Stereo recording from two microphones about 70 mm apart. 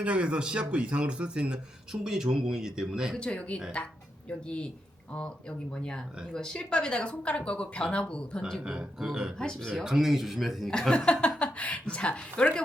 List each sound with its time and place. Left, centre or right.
0.0 s speech: centre
3.2 s speech: centre
8.4 s speech: centre
8.6 s speech: centre
9.4 s speech: centre
9.8 s speech: centre
10.7 s speech: centre